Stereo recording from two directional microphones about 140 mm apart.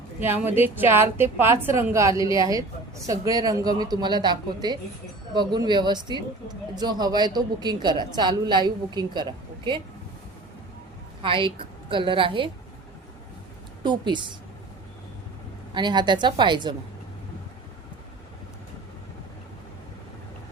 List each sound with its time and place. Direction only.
0.2 s a woman's voice: 15° right (ahead or behind); by 9.2 s 30° right (ahead or behind)
11.2 s a man's voice: 35° right (ahead or behind)
13.8 s a man's voice: 35° right (ahead or behind)
15.7 s a man's voice: 35° right (ahead or behind)